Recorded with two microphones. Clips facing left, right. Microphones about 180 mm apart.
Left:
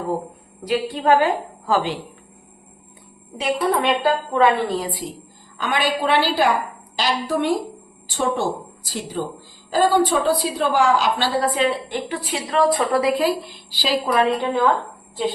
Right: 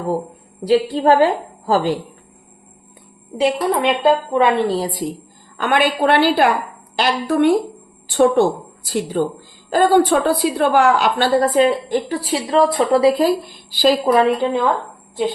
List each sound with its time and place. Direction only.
0.7 s a woman's voice: 35° right (ahead or behind)
3.3 s a woman's voice: 20° right (ahead or behind)
4.7 s a woman's voice: 40° right (ahead or behind)
5.5 s a woman's voice: 55° right (ahead or behind)
11.5 s a woman's voice: 40° right (ahead or behind)
13.2 s a woman's voice: 50° right (ahead or behind)
14.0 s a woman's voice: 25° right (ahead or behind)